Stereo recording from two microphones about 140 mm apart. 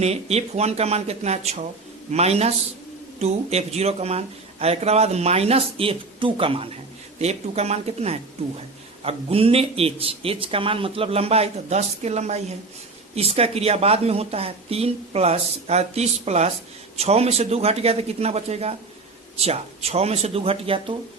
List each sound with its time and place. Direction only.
0.0 s speech: 50° right (ahead or behind)